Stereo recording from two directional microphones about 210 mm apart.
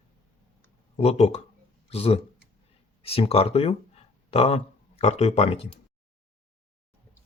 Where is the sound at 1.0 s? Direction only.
30° left (ahead or behind).